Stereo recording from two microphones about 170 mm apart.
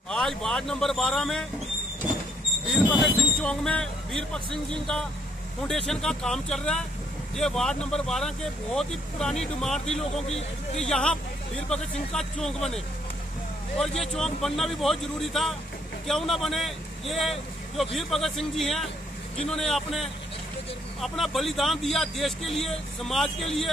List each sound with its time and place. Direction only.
0.1 s speech: 5° left (ahead or behind)
2.7 s speech: centre (ahead or behind)
10.2 s speech: 40° left (ahead or behind)
10.8 s speech: 5° left (ahead or behind)